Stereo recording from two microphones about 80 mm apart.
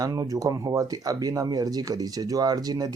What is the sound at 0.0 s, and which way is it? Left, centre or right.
Speech, right.